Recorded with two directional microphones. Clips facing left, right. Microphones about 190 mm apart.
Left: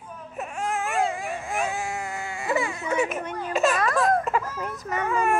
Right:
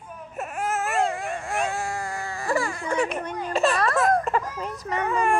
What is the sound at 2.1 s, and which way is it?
Baby cry, 25° left (ahead or behind).